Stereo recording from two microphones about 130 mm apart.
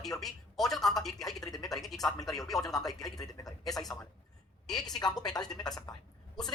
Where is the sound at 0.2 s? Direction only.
Centre (ahead or behind).